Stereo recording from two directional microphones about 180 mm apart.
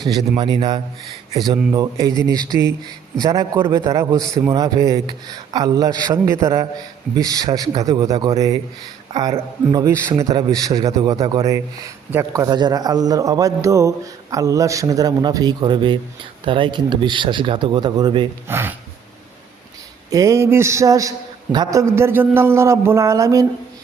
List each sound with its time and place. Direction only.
0.0 s a man's voice: 25° right (ahead or behind)
9.7 s a man's voice: 15° right (ahead or behind)
18.4 s a man's voice: 15° right (ahead or behind)
20.1 s a man's voice: 20° right (ahead or behind)